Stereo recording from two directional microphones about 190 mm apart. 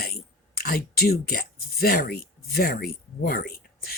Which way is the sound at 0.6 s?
50° left (ahead or behind).